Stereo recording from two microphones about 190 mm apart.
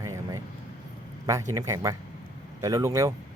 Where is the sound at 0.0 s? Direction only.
20° right (ahead or behind).